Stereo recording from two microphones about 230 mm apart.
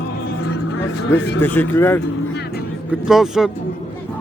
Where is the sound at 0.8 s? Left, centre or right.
Left.